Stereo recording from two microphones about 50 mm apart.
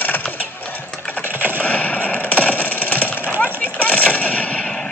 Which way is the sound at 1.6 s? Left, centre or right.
Left.